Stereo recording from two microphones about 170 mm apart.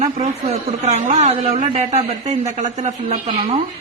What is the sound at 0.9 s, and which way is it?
A woman's voice, 40° right (ahead or behind).